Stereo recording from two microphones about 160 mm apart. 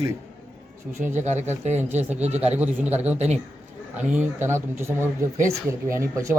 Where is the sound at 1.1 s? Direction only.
45° right (ahead or behind).